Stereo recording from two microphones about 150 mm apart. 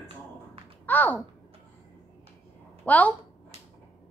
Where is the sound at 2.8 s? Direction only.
10° left (ahead or behind).